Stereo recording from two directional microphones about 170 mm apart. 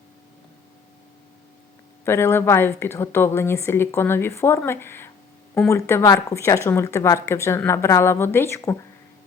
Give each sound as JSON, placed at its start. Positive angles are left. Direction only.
{"t": 2.0, "sound": "a woman's voice", "side_deg": 15}